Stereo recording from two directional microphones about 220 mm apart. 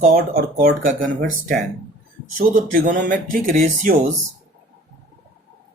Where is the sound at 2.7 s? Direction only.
35° right (ahead or behind).